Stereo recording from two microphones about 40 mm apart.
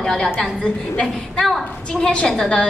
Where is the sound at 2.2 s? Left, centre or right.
Centre.